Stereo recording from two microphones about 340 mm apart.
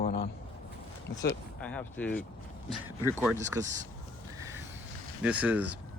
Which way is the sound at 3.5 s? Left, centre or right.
Centre.